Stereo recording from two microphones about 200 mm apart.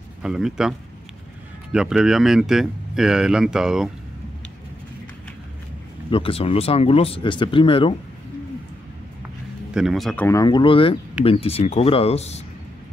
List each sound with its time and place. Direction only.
0.2 s speech: 5° right (ahead or behind)
6.0 s speech: 25° left (ahead or behind)
9.8 s speech: centre (ahead or behind); by 12.4 s 30° left (ahead or behind)